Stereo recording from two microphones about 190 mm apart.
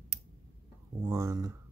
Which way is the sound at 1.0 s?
15° right (ahead or behind).